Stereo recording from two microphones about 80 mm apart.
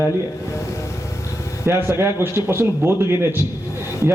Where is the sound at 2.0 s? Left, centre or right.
Right.